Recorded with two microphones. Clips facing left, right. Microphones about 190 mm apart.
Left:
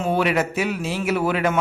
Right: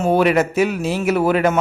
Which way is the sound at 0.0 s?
40° right (ahead or behind).